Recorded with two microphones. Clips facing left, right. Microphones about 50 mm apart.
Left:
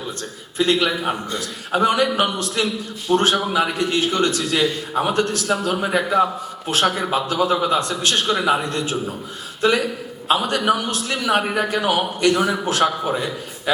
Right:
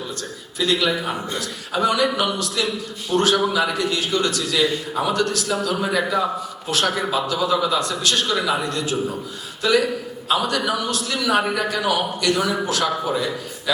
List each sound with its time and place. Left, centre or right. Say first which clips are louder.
0.6 s a man's voice: left 2 dB; left